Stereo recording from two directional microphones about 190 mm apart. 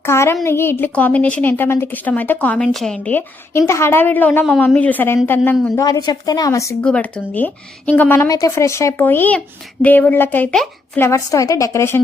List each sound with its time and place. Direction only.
0.0 s a woman's voice: 15° left (ahead or behind)